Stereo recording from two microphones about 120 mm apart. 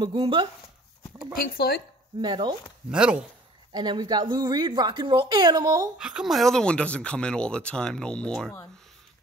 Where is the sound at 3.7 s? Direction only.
40° right (ahead or behind).